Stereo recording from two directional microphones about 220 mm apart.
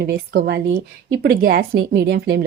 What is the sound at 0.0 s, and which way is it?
A woman's voice, 45° right (ahead or behind).